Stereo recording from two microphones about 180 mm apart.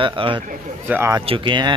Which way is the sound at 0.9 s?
15° right (ahead or behind).